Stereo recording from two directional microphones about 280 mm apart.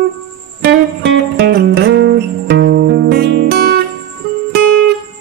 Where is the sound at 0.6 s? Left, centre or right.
Right.